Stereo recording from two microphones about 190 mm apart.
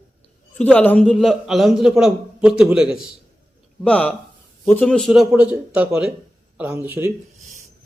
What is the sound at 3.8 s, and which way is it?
Speech, 5° left (ahead or behind).